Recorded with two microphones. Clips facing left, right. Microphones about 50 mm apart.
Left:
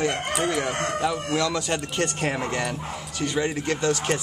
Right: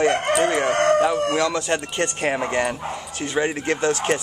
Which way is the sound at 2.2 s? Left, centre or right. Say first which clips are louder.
Right 4 dB; right.